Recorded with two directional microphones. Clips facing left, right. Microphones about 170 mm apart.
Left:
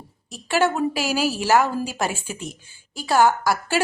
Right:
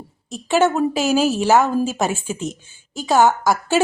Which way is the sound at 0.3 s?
20° right (ahead or behind).